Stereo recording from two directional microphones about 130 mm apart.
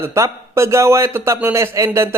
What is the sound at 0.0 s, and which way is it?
Speech, 20° right (ahead or behind).